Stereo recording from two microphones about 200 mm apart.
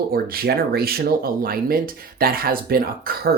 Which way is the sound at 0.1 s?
50° right (ahead or behind).